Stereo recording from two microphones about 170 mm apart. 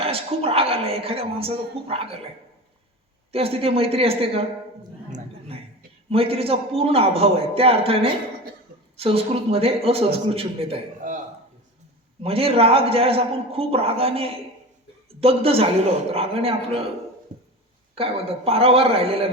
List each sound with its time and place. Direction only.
0.0 s a woman's voice: 35° right (ahead or behind)
3.3 s a woman's voice: 35° right (ahead or behind)
6.1 s a woman's voice: 35° right (ahead or behind)
12.2 s a woman's voice: 35° right (ahead or behind)
17.9 s a woman's voice: 35° right (ahead or behind)